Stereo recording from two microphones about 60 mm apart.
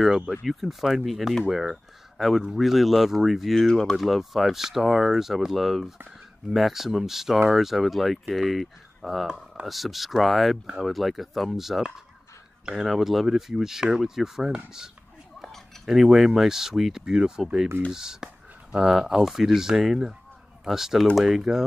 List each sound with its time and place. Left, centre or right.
0.0 s speech: centre
15.4 s speech: centre